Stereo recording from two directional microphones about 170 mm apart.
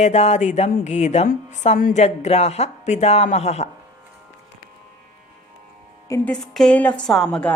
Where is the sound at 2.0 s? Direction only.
40° left (ahead or behind).